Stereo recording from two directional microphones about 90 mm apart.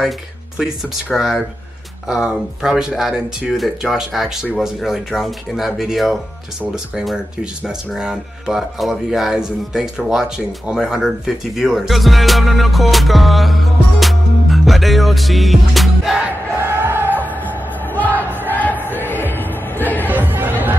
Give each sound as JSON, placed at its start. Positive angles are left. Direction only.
{"t": 1.1, "sound": "speech", "side_deg": -5}
{"t": 16.5, "sound": "crowd", "side_deg": -25}
{"t": 17.8, "sound": "music", "side_deg": 20}
{"t": 20.1, "sound": "music", "side_deg": -20}